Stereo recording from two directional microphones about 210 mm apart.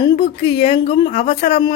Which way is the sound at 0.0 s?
20° left (ahead or behind).